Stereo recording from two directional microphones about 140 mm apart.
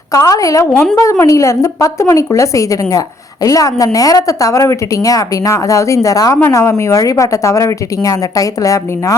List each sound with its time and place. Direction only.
0.1 s a woman's voice: 25° left (ahead or behind)
0.6 s a woman's voice: 10° left (ahead or behind)
1.2 s a woman's voice: 20° left (ahead or behind)